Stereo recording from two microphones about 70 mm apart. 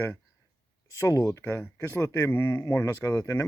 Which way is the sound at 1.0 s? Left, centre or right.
Left.